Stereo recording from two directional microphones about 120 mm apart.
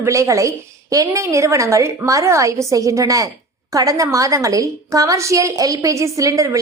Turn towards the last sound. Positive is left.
turn(degrees=-25)  # may be behind; listen again after turning